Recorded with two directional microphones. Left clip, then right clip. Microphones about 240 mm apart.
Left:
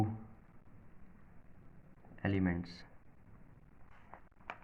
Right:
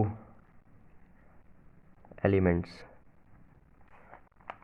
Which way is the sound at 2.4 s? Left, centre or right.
Right.